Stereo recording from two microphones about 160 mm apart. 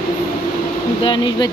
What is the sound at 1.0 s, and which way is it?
Speech, 30° left (ahead or behind).